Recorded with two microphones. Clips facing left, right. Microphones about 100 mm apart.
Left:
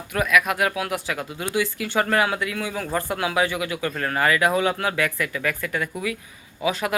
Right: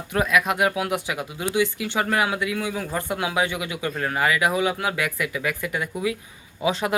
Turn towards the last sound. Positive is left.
turn(degrees=-25)  # may be behind; listen again after turning